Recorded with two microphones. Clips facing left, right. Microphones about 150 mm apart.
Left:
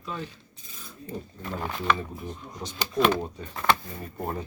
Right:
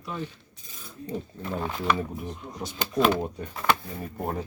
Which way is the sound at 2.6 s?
5° right (ahead or behind).